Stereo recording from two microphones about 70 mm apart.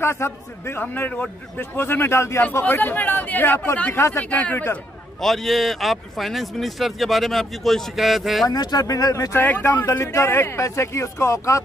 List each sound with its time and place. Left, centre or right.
0.0 s a man's voice: left
0.8 s speech: left
1.8 s a man's voice: left
2.6 s speech: left
3.9 s speech: left
4.2 s speech: left
5.2 s speech: centre
8.5 s speech: left
9.3 s a man's voice: left
9.8 s speech: left